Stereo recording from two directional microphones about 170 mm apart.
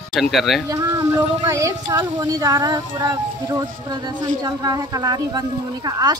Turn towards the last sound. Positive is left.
turn(degrees=-25)  # may be behind; listen again after turning